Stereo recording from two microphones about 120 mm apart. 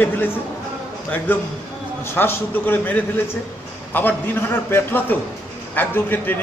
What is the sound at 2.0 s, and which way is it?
A man's voice, 20° left (ahead or behind).